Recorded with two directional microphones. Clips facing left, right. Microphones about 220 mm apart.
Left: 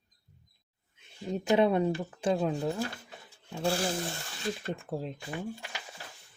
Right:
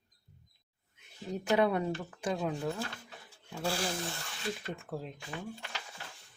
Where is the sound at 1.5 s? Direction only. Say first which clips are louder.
Left 4 dB; 25° left (ahead or behind).